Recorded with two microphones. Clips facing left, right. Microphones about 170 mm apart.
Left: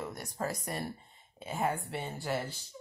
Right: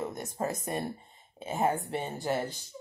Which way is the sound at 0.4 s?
20° right (ahead or behind).